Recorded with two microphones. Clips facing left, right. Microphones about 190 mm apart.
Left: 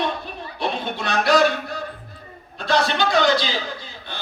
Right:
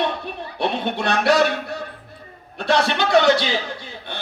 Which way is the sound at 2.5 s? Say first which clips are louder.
Right 1 dB; 70° right (ahead or behind).